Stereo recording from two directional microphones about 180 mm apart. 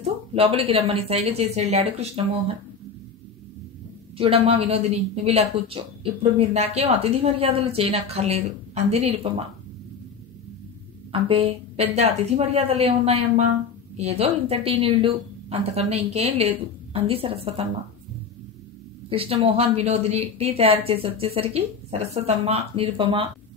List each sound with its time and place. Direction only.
0.0 s a woman's voice: 30° right (ahead or behind)
4.2 s a woman's voice: 35° right (ahead or behind)
11.1 s a woman's voice: 30° right (ahead or behind)
19.0 s a woman's voice: 30° right (ahead or behind)